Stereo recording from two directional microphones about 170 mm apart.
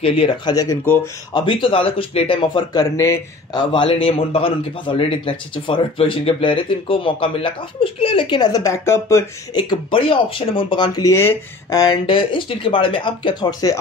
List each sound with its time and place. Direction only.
0.0 s speech: 35° left (ahead or behind)
0.6 s speech: 15° left (ahead or behind)
1.3 s speech: 30° left (ahead or behind)
3.7 s speech: 30° left (ahead or behind)